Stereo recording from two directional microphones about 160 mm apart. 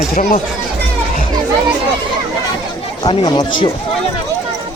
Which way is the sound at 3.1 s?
25° left (ahead or behind).